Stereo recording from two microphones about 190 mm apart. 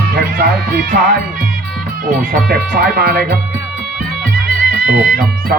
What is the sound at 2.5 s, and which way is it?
Speech, 50° right (ahead or behind).